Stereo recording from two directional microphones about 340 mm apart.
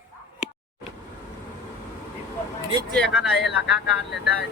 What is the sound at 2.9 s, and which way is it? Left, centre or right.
Speech, centre.